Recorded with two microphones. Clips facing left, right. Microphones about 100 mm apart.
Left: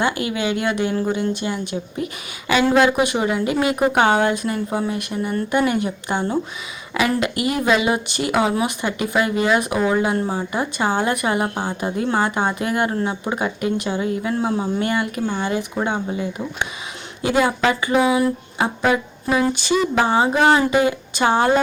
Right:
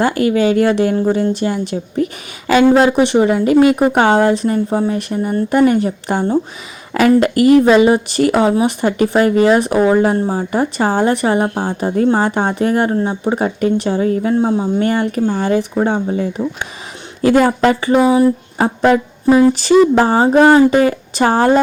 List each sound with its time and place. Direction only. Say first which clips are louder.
0.0 s speech: right 8 dB; 40° right (ahead or behind)
3.9 s speech: right 5 dB; 35° right (ahead or behind)